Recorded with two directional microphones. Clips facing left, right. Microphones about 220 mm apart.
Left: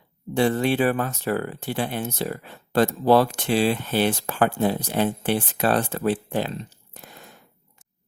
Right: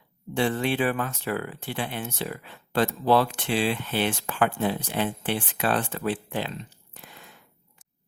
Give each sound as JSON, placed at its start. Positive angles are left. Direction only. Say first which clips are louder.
{"t": 0.3, "sound": "speech", "louder": "left 4 dB", "side_deg": 40}